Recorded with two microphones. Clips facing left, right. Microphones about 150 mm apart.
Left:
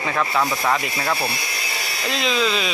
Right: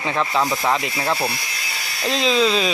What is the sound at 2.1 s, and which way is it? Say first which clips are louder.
Speech: right 4 dB; 30° right (ahead or behind).